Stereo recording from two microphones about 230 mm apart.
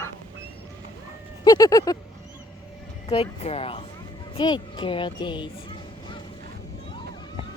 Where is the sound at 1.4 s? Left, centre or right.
Centre.